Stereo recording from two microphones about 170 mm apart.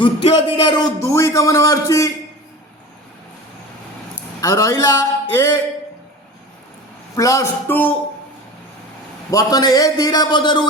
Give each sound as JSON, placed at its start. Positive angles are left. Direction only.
{"t": 0.0, "sound": "speech", "side_deg": 30}
{"t": 4.4, "sound": "speech", "side_deg": 20}
{"t": 7.2, "sound": "speech", "side_deg": 20}
{"t": 9.3, "sound": "speech", "side_deg": 20}